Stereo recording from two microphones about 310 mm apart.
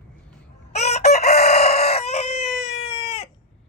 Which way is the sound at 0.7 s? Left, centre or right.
Left.